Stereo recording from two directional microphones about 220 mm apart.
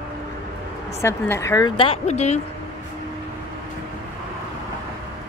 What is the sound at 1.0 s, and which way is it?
A woman's voice, 10° left (ahead or behind).